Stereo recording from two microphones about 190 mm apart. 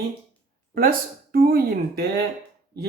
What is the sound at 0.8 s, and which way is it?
Speech, 50° right (ahead or behind).